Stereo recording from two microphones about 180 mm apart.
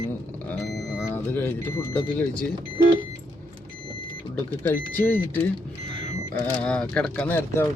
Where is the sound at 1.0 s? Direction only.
10° left (ahead or behind).